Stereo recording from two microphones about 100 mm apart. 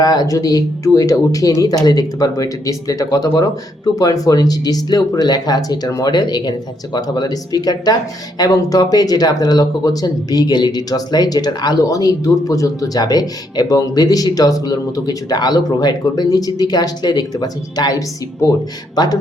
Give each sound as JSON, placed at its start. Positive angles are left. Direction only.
{"t": 0.0, "sound": "speech", "side_deg": 40}